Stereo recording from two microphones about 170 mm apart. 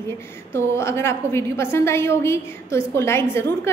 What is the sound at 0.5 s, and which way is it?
A woman's voice, 15° left (ahead or behind).